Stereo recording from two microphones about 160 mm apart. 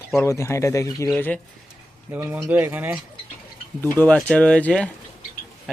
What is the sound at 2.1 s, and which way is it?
Speech, 10° right (ahead or behind).